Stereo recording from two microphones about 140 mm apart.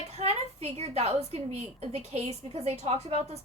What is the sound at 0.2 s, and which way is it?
A woman's voice, 50° right (ahead or behind).